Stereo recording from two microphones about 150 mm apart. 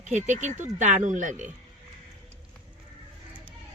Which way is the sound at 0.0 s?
55° right (ahead or behind).